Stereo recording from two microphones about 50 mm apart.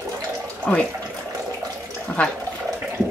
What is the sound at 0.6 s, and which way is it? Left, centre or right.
Speech, centre.